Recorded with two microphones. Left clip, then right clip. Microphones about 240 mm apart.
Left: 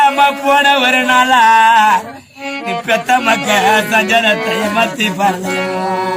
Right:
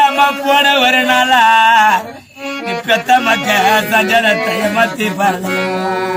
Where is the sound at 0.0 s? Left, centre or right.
Right.